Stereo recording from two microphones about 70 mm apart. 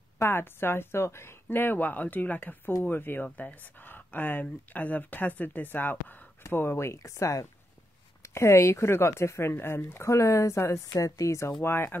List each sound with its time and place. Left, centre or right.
0.2 s speech: left
11.6 s speech: left